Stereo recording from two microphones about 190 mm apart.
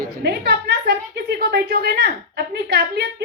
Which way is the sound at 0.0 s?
55° right (ahead or behind).